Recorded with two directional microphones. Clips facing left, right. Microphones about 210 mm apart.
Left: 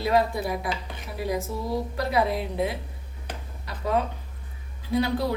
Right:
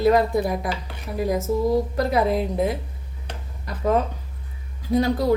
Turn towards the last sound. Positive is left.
turn(degrees=-45)  # may be behind; listen again after turning